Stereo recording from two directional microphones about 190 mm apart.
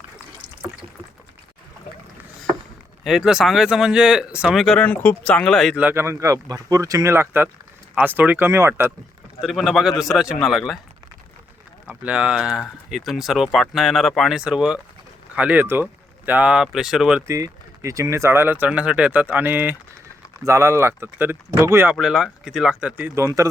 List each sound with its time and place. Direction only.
3.0 s speech: centre (ahead or behind)
9.4 s speech: centre (ahead or behind)
11.9 s speech: 5° right (ahead or behind)
17.2 s speech: 15° right (ahead or behind)
21.9 s speech: centre (ahead or behind)